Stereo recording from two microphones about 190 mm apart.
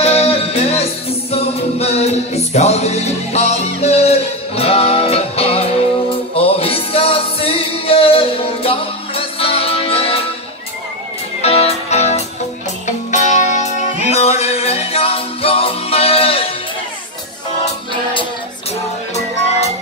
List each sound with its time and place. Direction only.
0.0 s music: 35° left (ahead or behind)
11.4 s music: 35° left (ahead or behind)